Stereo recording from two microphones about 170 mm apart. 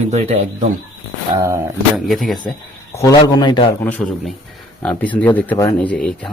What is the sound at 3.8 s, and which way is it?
Speech, 10° left (ahead or behind).